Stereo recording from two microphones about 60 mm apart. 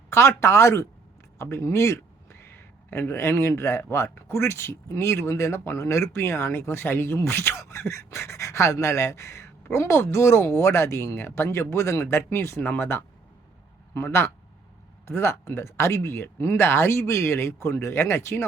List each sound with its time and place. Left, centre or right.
0.1 s speech: left
2.4 s speech: left
12.6 s speech: left
13.9 s speech: left